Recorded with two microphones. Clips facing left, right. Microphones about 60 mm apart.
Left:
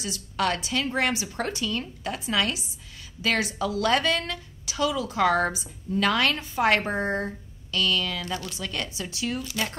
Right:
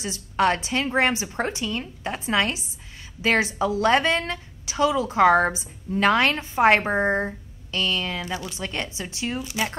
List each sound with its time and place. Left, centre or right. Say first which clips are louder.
0.0 s a woman's voice: right 5 dB; right
8.3 s speech: right 2 dB; centre
8.5 s a woman's voice: right 2 dB; right